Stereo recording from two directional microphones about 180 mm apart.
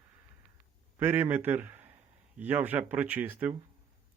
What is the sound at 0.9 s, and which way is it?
A man's voice, 10° right (ahead or behind).